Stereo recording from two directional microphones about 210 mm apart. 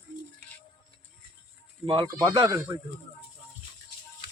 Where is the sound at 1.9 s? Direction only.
25° right (ahead or behind).